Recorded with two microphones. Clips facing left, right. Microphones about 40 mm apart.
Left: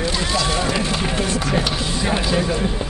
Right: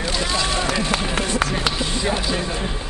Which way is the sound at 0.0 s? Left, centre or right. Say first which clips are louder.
Left 1 dB; centre.